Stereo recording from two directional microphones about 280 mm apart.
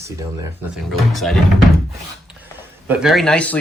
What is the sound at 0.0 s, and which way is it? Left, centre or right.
Speech, centre.